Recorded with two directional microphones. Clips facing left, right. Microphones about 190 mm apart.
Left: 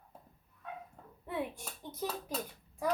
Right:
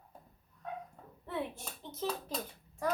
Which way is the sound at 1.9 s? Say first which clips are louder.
Right 1 dB; 10° left (ahead or behind).